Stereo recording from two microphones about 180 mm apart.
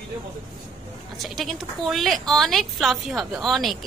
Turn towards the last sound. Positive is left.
turn(degrees=0)  # may be behind; listen again after turning